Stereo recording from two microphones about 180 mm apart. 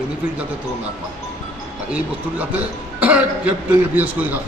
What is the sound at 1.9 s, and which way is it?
Speech, 10° right (ahead or behind).